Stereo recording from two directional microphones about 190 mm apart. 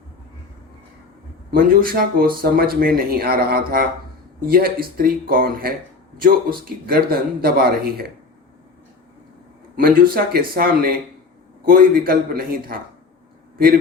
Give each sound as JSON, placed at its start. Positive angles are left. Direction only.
{"t": 1.5, "sound": "speech", "side_deg": -50}
{"t": 9.8, "sound": "speech", "side_deg": -50}